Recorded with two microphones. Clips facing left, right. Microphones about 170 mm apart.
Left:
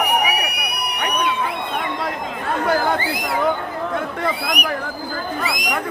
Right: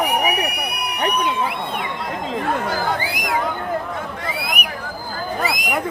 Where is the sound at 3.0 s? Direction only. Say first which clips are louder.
Left 2 dB; 10° right (ahead or behind).